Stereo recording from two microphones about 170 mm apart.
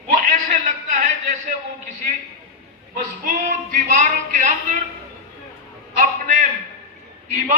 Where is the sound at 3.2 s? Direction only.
50° right (ahead or behind).